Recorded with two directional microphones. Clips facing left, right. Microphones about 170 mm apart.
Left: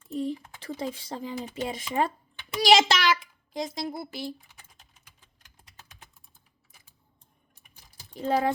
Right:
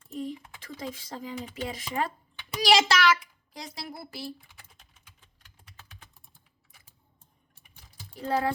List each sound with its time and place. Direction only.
0.2 s a child's voice: 30° left (ahead or behind)
8.1 s speech: 20° left (ahead or behind)